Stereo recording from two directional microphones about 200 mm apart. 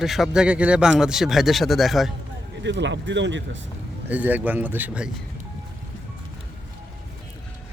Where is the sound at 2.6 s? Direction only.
65° right (ahead or behind).